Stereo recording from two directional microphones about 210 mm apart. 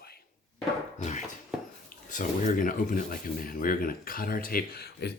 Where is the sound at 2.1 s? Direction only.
35° left (ahead or behind).